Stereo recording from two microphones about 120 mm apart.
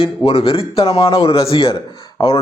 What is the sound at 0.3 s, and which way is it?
A man's voice, 55° left (ahead or behind).